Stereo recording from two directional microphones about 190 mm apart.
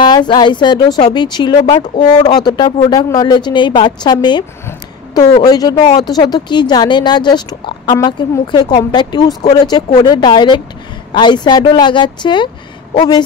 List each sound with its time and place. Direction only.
0.0 s speech: 25° left (ahead or behind)